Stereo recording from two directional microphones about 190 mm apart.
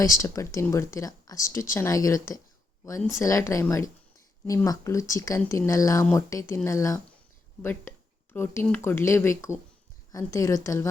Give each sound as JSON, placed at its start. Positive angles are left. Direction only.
{"t": 0.0, "sound": "speech", "side_deg": 15}